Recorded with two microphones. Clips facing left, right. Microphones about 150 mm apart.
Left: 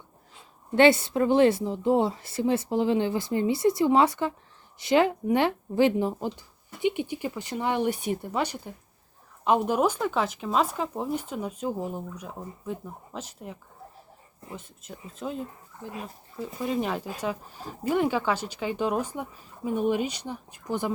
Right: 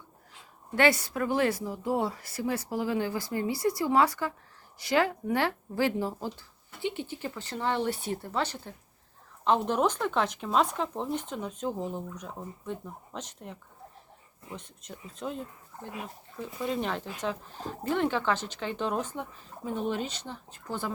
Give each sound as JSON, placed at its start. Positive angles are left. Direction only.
{"t": 0.8, "sound": "a woman's voice", "side_deg": 25}